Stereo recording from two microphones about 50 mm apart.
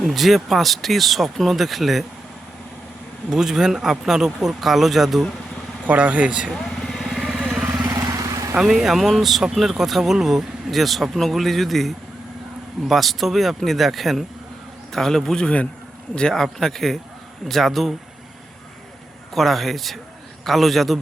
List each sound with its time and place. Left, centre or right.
0.0 s speech: centre
3.2 s speech: centre
5.8 s speech: right
6.5 s vehicle: centre
7.2 s vehicle: centre
7.9 s vehicle: right
8.8 s speech: centre
19.3 s speech: centre